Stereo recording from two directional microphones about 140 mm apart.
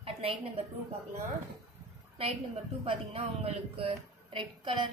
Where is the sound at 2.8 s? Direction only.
45° right (ahead or behind).